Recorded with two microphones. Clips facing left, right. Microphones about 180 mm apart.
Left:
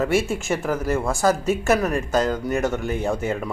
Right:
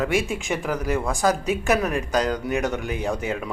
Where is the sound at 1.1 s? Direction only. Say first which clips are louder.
Left 2 dB; 10° right (ahead or behind).